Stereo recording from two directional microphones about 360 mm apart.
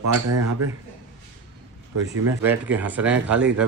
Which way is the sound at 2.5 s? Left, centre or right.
Centre.